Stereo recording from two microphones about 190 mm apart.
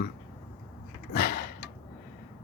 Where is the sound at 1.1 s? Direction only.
55° left (ahead or behind).